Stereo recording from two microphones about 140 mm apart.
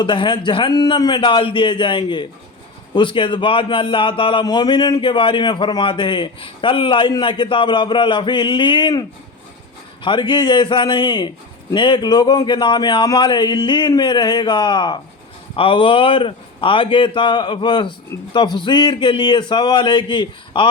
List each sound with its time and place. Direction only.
0.0 s a man's voice: 35° left (ahead or behind)